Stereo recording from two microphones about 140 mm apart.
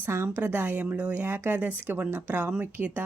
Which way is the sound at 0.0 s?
15° right (ahead or behind).